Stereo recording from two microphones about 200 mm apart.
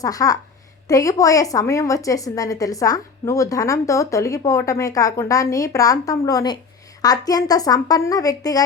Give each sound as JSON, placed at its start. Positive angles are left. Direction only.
{"t": 0.0, "sound": "a woman's voice", "side_deg": 20}